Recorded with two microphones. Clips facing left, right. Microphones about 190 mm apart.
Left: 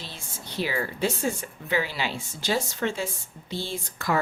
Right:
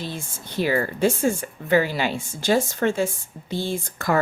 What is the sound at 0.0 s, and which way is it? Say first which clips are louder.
Speech: right 9 dB; 50° right (ahead or behind).